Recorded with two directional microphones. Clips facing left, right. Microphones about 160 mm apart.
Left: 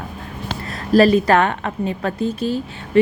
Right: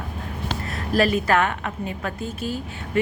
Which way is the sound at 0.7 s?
35° left (ahead or behind).